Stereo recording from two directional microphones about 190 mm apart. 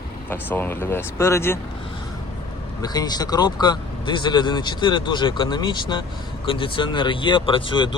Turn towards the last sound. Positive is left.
turn(degrees=25)  # may be behind; listen again after turning